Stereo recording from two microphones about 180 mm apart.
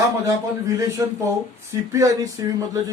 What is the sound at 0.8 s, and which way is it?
Speech, 20° right (ahead or behind).